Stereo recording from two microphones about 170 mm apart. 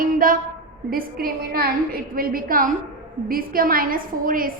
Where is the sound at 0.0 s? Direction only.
55° right (ahead or behind).